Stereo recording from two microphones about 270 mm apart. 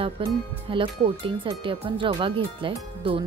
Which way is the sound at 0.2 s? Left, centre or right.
Centre.